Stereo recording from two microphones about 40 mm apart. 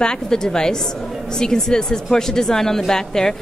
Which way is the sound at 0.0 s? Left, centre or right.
Centre.